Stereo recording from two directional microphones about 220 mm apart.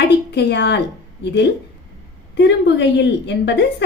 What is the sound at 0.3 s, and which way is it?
A woman's voice, 50° left (ahead or behind).